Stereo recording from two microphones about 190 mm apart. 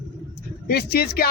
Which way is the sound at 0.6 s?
55° left (ahead or behind).